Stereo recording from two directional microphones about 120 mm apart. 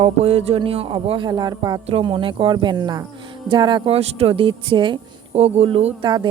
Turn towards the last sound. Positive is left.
turn(degrees=-40)  # may be behind; listen again after turning